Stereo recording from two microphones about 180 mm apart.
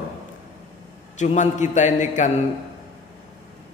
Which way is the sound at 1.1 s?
40° left (ahead or behind).